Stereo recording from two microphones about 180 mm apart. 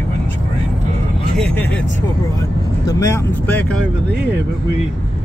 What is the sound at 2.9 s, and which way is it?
Speech, 15° left (ahead or behind).